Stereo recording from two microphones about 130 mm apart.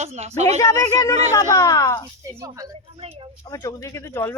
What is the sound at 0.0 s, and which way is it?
Speech, 55° right (ahead or behind).